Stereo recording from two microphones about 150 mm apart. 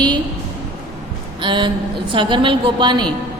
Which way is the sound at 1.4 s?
35° right (ahead or behind).